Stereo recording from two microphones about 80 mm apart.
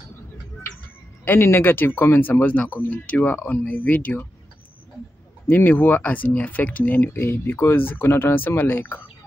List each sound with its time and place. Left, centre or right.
1.2 s speech: left
5.5 s speech: left